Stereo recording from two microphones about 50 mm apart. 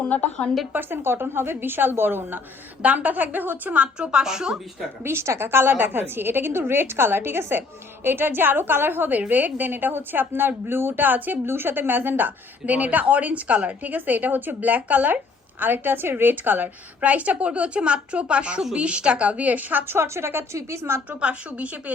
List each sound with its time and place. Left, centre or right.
0.0 s a woman's voice: left
0.7 s a woman's voice: right
2.8 s a woman's voice: right
3.9 s a woman's voice: centre
5.0 s a woman's voice: right
5.7 s a woman's voice: right
20.0 s a woman's voice: right
21.1 s a woman's voice: right